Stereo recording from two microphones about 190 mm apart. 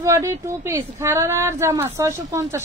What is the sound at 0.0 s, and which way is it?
Speech, 15° right (ahead or behind).